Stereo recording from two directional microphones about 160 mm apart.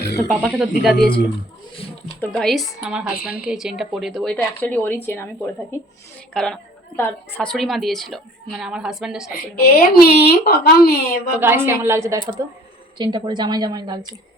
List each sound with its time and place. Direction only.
0.3 s a woman's voice: 5° right (ahead or behind)
2.2 s a woman's voice: 5° left (ahead or behind)
6.3 s a woman's voice: 5° left (ahead or behind)
9.6 s a woman's voice: 70° left (ahead or behind)
11.3 s a woman's voice: 15° right (ahead or behind)